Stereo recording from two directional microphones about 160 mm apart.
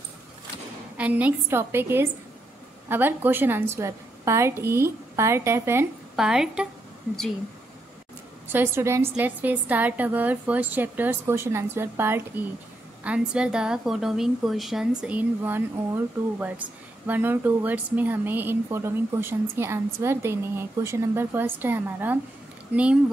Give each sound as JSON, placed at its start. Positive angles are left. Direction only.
{"t": 0.9, "sound": "a woman's voice", "side_deg": -10}
{"t": 6.1, "sound": "speech", "side_deg": -5}
{"t": 8.5, "sound": "a woman's voice", "side_deg": -15}